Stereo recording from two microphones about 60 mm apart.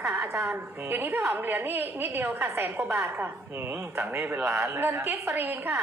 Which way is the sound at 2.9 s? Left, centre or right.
Right.